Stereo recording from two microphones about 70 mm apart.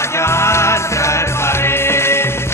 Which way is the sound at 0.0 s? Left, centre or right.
Left.